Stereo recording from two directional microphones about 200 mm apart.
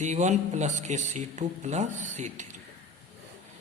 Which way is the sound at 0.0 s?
35° right (ahead or behind).